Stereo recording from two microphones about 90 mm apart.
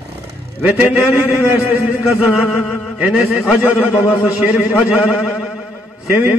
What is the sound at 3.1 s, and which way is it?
Mantra, 10° right (ahead or behind).